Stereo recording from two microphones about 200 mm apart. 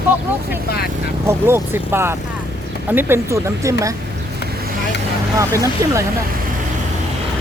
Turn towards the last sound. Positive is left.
turn(degrees=-15)  # may be behind; listen again after turning